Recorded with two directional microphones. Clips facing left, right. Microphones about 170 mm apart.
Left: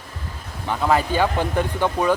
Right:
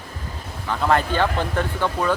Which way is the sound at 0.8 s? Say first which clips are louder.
Left 1 dB; 10° left (ahead or behind).